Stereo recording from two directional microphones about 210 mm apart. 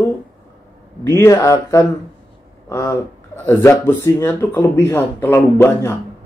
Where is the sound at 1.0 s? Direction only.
15° left (ahead or behind).